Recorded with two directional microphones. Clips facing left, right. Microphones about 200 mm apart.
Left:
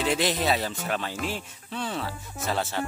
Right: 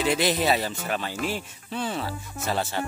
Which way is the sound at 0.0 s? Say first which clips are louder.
Right 2 dB; 5° right (ahead or behind).